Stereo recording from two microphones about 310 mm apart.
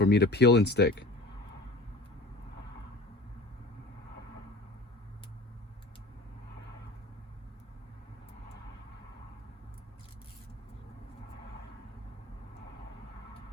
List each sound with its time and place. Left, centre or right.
0.0 s speech: left